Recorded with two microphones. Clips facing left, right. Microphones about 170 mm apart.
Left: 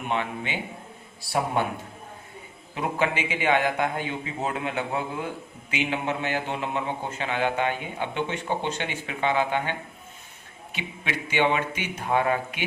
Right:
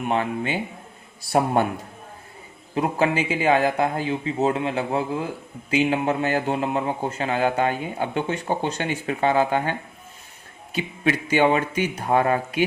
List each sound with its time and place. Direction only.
0.1 s a man's voice: 40° right (ahead or behind)
2.7 s a man's voice: 35° right (ahead or behind)